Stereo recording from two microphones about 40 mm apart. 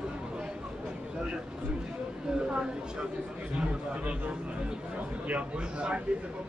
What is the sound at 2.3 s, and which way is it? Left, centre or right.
A woman's voice, right.